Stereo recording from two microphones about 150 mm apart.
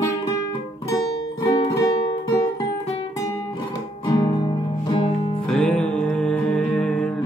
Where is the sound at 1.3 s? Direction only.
25° left (ahead or behind).